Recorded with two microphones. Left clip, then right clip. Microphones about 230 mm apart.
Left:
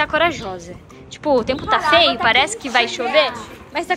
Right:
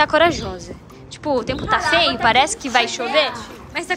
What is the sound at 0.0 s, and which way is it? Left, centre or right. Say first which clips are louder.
A woman's voice: right 2 dB; centre.